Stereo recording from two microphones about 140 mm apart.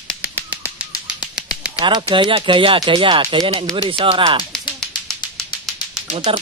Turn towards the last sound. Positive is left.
turn(degrees=-40)  # may be behind; listen again after turning